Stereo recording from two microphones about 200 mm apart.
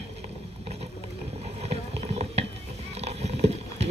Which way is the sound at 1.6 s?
30° right (ahead or behind).